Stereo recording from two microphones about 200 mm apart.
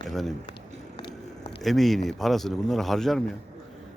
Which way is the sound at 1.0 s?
25° left (ahead or behind).